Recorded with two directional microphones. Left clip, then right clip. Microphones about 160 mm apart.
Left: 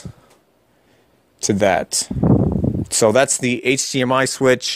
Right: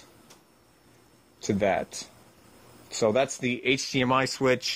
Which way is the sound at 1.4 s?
50° left (ahead or behind).